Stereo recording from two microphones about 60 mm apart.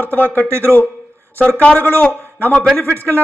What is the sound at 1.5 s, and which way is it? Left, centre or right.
Speech, left.